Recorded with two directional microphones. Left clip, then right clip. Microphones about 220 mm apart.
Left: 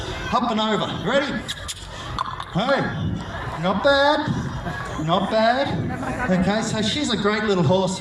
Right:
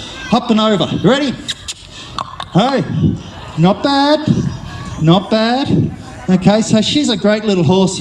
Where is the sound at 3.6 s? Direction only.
50° right (ahead or behind).